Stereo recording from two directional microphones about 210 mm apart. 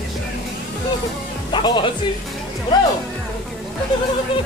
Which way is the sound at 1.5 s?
20° left (ahead or behind).